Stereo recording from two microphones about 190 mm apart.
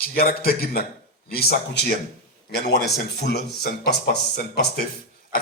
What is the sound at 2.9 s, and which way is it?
Speech, 60° left (ahead or behind).